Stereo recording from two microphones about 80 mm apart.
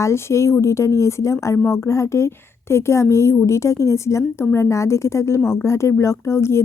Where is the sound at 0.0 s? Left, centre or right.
Left.